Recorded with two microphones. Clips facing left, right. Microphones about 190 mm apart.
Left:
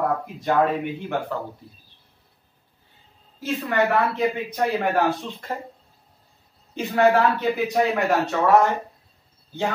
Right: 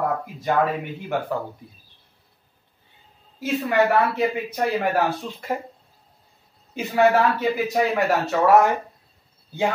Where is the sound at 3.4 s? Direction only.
10° right (ahead or behind).